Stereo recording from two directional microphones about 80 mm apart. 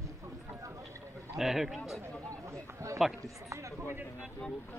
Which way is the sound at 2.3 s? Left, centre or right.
Right.